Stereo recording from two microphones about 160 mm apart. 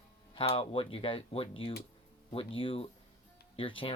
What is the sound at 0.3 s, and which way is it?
Speech, 35° left (ahead or behind).